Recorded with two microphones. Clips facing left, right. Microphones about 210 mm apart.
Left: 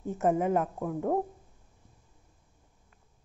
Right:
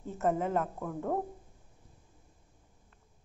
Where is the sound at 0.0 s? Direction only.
15° left (ahead or behind).